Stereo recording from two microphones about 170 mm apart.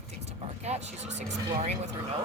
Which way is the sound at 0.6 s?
40° right (ahead or behind).